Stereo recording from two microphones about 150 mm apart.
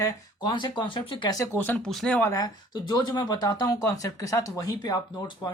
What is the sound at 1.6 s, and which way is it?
Speech, 5° left (ahead or behind).